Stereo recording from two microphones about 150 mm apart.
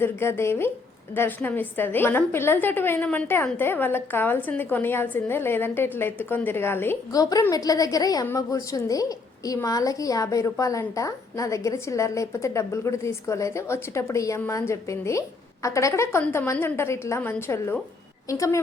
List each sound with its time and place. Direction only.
0.0 s a woman's voice: 15° left (ahead or behind)